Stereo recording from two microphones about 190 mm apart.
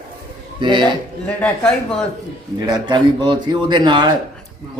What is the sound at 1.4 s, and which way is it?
Speech, 10° left (ahead or behind).